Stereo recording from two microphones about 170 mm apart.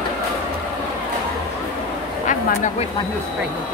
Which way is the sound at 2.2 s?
45° left (ahead or behind).